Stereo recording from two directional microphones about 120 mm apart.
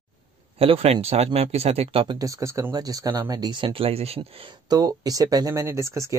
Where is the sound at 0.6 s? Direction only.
55° right (ahead or behind).